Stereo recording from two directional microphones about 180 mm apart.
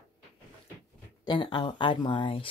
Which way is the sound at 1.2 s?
25° left (ahead or behind).